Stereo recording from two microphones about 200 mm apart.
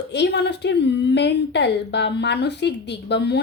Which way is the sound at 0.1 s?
60° left (ahead or behind).